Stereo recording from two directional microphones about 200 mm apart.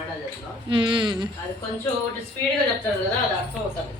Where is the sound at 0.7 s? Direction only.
25° right (ahead or behind).